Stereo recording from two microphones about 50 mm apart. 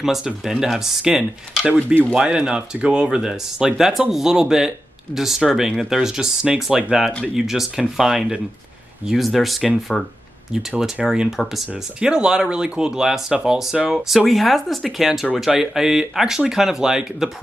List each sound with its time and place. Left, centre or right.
0.0 s speech: centre
9.9 s speech: centre
10.5 s speech: centre
11.7 s speech: centre